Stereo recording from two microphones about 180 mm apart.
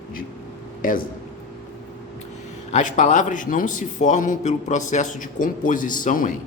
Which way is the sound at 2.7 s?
45° left (ahead or behind).